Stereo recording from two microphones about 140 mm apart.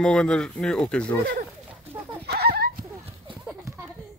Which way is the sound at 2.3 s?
90° right.